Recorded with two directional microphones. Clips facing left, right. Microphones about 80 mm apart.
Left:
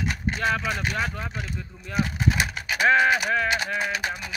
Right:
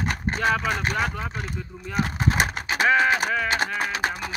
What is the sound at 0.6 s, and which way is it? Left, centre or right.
Speech, right.